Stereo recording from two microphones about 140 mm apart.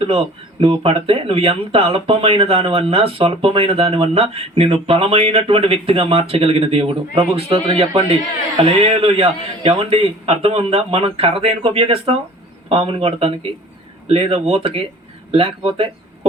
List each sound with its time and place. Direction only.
0.6 s speech: 45° right (ahead or behind)